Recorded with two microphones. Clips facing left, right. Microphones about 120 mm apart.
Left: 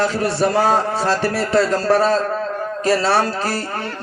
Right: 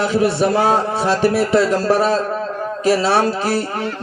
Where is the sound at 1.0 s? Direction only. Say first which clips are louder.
Right 3 dB; 15° right (ahead or behind).